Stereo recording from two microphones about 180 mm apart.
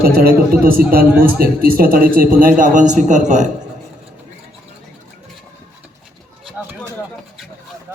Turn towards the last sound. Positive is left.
turn(degrees=-10)  # may be behind; listen again after turning